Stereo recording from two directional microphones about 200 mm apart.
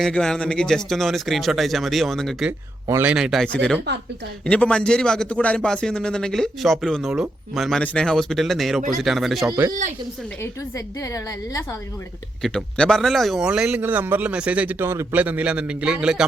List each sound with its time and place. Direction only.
0.0 s a man's voice: 5° left (ahead or behind)
2.8 s a man's voice: 10° right (ahead or behind)
9.5 s speech: 20° right (ahead or behind)
10.4 s a woman's voice: 15° left (ahead or behind)
12.4 s a man's voice: 5° left (ahead or behind)